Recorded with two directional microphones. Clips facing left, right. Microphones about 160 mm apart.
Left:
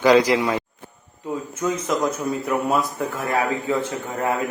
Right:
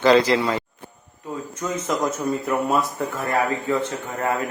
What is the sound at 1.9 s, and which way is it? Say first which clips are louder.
A man's voice: right 3 dB; centre (ahead or behind).